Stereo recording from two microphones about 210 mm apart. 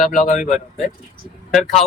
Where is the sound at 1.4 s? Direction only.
Centre (ahead or behind).